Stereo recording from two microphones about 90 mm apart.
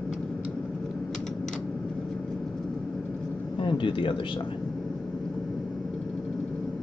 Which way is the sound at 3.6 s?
60° left (ahead or behind).